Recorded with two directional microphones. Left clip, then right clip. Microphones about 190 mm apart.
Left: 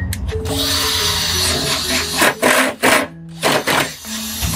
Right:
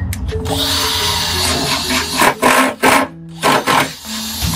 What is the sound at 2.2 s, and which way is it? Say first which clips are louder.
Rub: right 2 dB; centre (ahead or behind).